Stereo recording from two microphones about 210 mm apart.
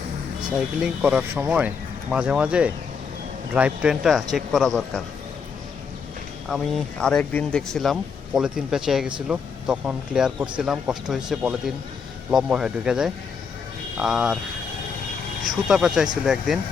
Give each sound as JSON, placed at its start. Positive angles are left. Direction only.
{"t": 0.8, "sound": "speech", "side_deg": -5}
{"t": 6.5, "sound": "speech", "side_deg": 0}
{"t": 15.6, "sound": "speech", "side_deg": -5}